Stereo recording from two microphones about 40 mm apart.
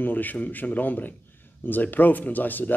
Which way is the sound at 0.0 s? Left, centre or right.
Left.